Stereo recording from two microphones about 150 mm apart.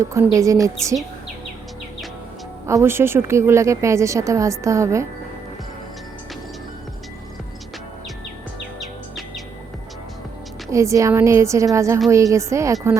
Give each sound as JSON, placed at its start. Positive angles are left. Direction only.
{"t": 0.0, "sound": "a woman's voice", "side_deg": -20}
{"t": 2.6, "sound": "a woman's voice", "side_deg": -15}
{"t": 8.8, "sound": "music", "side_deg": 0}
{"t": 10.7, "sound": "a woman's voice", "side_deg": -20}